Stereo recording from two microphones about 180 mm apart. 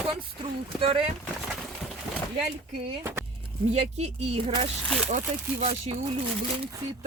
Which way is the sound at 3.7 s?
40° right (ahead or behind).